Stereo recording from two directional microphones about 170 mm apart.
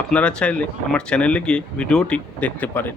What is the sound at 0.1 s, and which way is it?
Speech, 5° left (ahead or behind).